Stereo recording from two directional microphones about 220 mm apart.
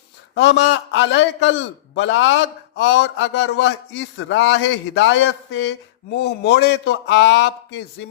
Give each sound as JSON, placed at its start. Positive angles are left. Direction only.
{"t": 0.3, "sound": "a man's voice", "side_deg": 50}